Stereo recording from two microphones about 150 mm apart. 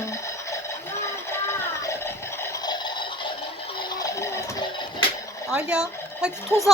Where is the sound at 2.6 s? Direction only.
30° left (ahead or behind).